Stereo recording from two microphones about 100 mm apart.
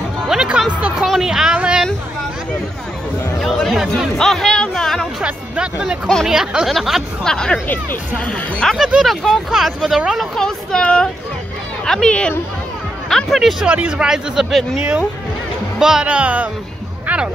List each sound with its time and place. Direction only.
0.3 s music: 5° right (ahead or behind)
1.0 s speech: 5° right (ahead or behind)
3.3 s speech: 5° left (ahead or behind)
5.2 s speech: 10° right (ahead or behind)
7.6 s speech: 20° left (ahead or behind)
8.7 s speech: 5° right (ahead or behind); by 12.4 s 10° left (ahead or behind)
13.1 s speech: centre (ahead or behind)